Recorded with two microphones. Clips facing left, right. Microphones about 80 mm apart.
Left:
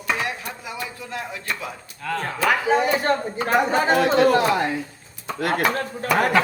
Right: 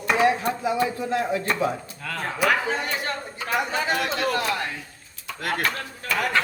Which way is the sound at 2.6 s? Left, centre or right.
Centre.